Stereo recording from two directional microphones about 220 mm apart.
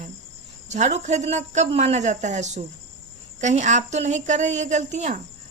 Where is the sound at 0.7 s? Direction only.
30° right (ahead or behind).